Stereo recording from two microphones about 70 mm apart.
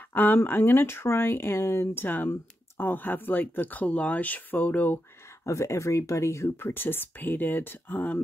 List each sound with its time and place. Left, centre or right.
0.1 s speech: left
2.0 s speech: left
5.4 s speech: left